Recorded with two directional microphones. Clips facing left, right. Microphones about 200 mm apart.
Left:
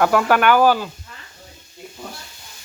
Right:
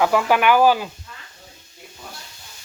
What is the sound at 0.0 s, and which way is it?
Speech, 5° right (ahead or behind).